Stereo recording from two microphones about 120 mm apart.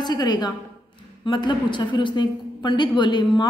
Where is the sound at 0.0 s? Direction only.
35° left (ahead or behind).